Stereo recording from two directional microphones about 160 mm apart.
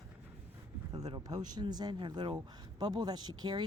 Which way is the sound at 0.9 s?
25° right (ahead or behind).